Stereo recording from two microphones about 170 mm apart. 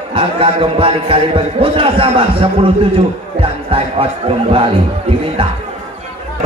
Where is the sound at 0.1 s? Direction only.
30° right (ahead or behind).